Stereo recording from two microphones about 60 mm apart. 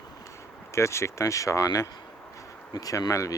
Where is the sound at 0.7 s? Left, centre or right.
Left.